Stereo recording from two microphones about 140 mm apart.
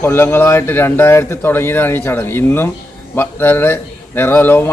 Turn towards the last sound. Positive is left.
turn(degrees=15)  # may be behind; listen again after turning